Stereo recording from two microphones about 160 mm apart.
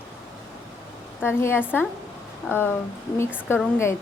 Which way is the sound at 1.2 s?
15° left (ahead or behind).